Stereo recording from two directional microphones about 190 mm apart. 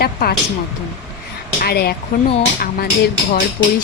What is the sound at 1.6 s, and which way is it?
Speech, 55° left (ahead or behind).